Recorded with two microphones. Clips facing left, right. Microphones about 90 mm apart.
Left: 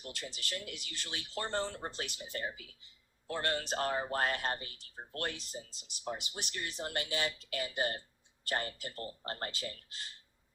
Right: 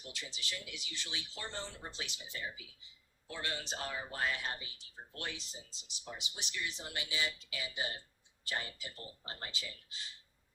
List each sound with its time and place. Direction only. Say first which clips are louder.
0.0 s speech: left 3 dB; 50° left (ahead or behind)